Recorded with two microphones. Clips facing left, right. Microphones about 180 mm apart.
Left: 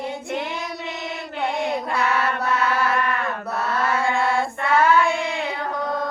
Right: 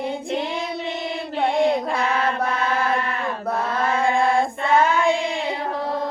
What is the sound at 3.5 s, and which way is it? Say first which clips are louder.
Mantra: right 1 dB; 50° right (ahead or behind).